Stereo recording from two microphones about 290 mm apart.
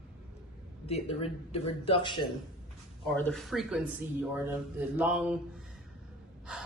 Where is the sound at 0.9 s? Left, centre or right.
Centre.